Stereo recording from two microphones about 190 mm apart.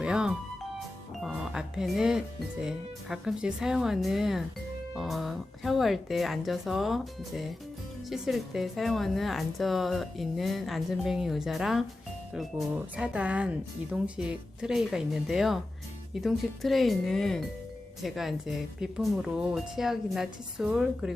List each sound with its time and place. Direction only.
0.0 s music: 5° right (ahead or behind)
1.2 s a woman's voice: 5° right (ahead or behind)